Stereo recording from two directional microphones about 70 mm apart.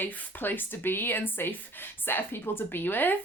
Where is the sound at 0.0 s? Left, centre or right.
Left.